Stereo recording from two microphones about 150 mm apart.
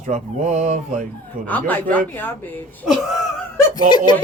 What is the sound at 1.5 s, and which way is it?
Speech, 10° left (ahead or behind).